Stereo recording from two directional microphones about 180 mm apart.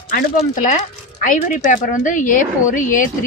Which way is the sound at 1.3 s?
45° left (ahead or behind).